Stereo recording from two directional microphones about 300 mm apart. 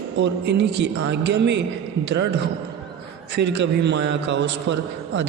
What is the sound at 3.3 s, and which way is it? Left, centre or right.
A woman's voice, right.